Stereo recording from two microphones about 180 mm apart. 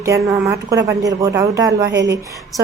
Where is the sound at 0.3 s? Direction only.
15° right (ahead or behind).